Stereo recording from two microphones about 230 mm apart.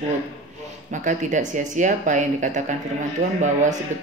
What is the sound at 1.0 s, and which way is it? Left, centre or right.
Speech, right.